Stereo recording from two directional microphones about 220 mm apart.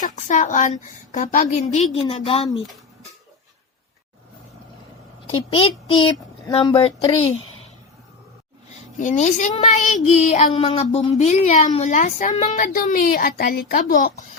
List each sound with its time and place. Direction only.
0.0 s speech: 35° left (ahead or behind)
5.2 s speech: 25° left (ahead or behind)
9.0 s speech: 35° left (ahead or behind)